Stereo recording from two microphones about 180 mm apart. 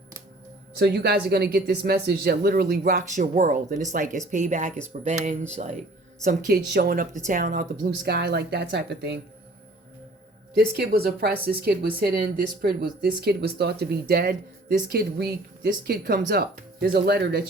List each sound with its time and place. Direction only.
0.8 s speech: 65° right (ahead or behind); by 5.7 s 40° right (ahead or behind)
6.7 s speech: 55° right (ahead or behind)
10.5 s speech: 60° right (ahead or behind)